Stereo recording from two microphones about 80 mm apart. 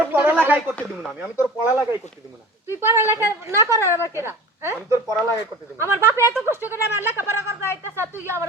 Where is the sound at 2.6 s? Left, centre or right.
Right.